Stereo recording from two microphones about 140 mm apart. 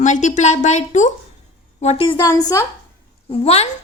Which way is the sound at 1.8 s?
45° left (ahead or behind).